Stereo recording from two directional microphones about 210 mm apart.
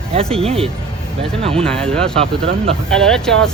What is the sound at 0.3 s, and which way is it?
Speech, 25° right (ahead or behind).